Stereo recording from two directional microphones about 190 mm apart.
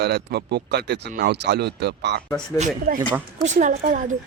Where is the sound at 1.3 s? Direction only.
60° right (ahead or behind).